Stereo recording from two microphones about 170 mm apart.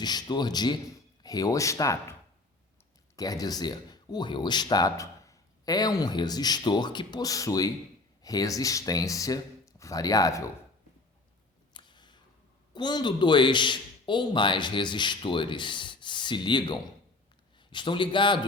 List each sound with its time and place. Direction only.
0.0 s speech: 25° left (ahead or behind)
3.2 s speech: 20° left (ahead or behind)
11.7 s a sound: 25° left (ahead or behind)
12.7 s a man's voice: 25° left (ahead or behind)